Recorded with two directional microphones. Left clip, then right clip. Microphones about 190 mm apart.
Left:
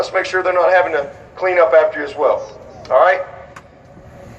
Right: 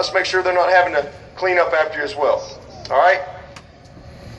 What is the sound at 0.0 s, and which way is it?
A man's voice, 50° left (ahead or behind).